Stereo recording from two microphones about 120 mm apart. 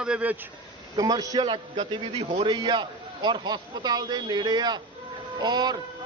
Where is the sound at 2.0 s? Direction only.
50° right (ahead or behind); by 5.8 s 35° right (ahead or behind).